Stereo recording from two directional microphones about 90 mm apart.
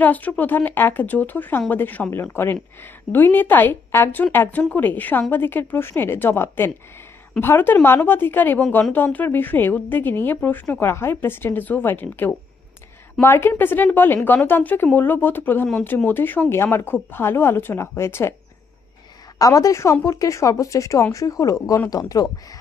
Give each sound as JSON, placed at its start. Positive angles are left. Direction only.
{"t": 0.0, "sound": "a woman's voice", "side_deg": 20}
{"t": 19.3, "sound": "speech", "side_deg": 40}